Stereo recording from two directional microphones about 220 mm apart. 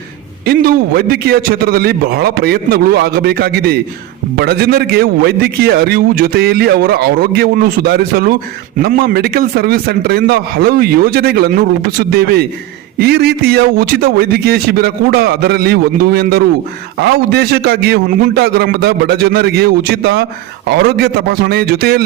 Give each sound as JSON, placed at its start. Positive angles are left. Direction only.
{"t": 0.4, "sound": "a man's voice", "side_deg": -45}